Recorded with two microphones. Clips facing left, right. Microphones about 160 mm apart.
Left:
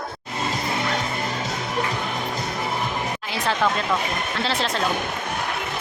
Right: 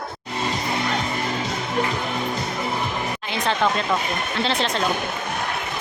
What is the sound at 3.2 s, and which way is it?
A woman's voice, 5° left (ahead or behind).